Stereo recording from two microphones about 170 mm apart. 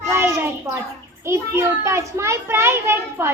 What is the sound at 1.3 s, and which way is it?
A woman's voice, 15° right (ahead or behind).